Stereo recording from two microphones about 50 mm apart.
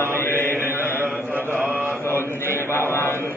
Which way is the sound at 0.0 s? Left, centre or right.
Left.